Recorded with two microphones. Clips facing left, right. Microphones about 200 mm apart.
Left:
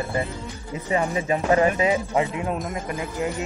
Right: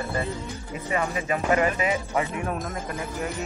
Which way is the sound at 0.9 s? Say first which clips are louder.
Left 4 dB; 25° left (ahead or behind).